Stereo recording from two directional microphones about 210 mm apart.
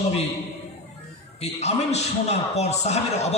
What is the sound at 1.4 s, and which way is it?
A man's voice, 30° left (ahead or behind).